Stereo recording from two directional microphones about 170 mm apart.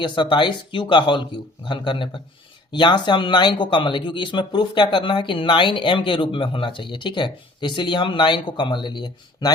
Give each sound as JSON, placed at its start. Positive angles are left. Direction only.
{"t": 0.0, "sound": "speech", "side_deg": 30}